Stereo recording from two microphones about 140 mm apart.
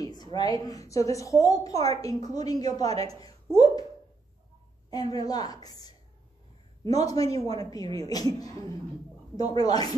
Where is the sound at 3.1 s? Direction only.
25° left (ahead or behind).